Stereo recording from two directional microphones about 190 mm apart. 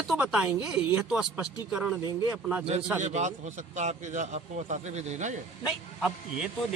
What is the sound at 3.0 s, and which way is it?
A man's voice, 40° right (ahead or behind).